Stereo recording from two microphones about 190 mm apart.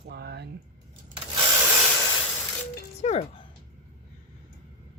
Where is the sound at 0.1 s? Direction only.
60° right (ahead or behind).